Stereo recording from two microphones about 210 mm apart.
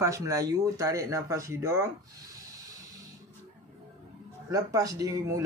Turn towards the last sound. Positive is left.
turn(degrees=-15)  # may be behind; listen again after turning